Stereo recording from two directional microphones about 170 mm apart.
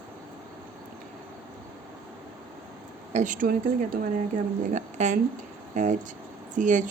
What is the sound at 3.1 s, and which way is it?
Speech, 50° right (ahead or behind).